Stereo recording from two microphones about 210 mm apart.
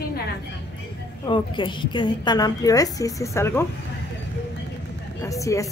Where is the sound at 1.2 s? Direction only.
25° left (ahead or behind).